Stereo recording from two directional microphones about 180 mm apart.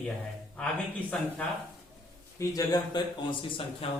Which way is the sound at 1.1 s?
5° left (ahead or behind).